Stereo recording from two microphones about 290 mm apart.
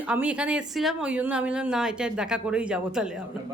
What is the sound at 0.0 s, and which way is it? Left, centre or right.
Speech, centre.